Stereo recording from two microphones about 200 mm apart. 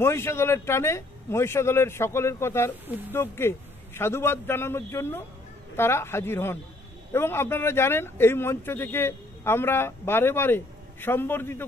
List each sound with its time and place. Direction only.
0.0 s speech: 10° left (ahead or behind)